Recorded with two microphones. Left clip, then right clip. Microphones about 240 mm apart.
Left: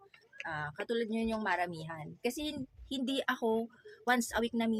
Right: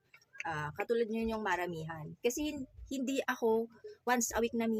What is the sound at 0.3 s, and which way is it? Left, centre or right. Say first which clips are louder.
Speech: right 1 dB; centre.